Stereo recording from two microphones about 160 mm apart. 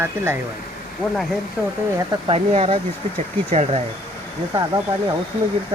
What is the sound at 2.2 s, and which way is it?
Speech, 35° right (ahead or behind).